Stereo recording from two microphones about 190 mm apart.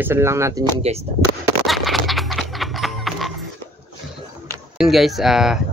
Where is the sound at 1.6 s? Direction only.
Centre (ahead or behind).